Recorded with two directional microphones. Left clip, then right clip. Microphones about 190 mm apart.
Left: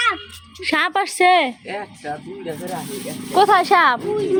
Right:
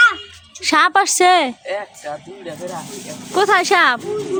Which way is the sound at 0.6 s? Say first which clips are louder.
Right 5 dB; 30° right (ahead or behind).